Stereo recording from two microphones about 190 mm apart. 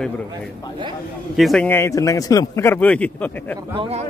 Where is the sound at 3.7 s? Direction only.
30° right (ahead or behind).